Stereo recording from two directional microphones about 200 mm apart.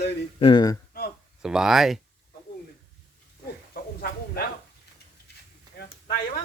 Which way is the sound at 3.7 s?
45° left (ahead or behind).